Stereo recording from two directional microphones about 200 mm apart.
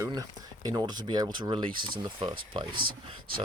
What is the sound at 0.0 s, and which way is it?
Speech, 15° right (ahead or behind).